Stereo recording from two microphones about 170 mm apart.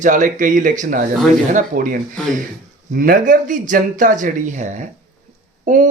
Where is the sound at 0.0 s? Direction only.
50° right (ahead or behind).